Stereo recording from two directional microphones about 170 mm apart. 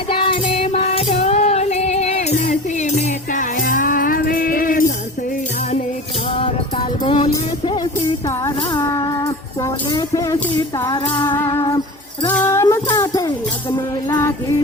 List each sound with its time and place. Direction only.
0.1 s music: 30° left (ahead or behind); by 4.9 s 55° left (ahead or behind)
7.0 s music: 30° left (ahead or behind)
8.4 s music: 20° left (ahead or behind)
12.3 s music: 10° left (ahead or behind)